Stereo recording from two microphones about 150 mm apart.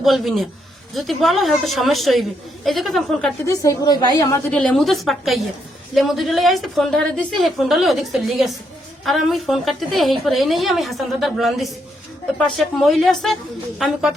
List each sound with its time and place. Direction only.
0.0 s a woman's voice: centre (ahead or behind)
3.4 s a woman's voice: 20° left (ahead or behind)
4.5 s a woman's voice: 5° left (ahead or behind)